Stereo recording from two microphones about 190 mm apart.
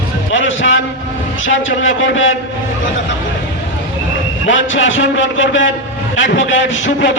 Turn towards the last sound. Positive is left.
turn(degrees=80)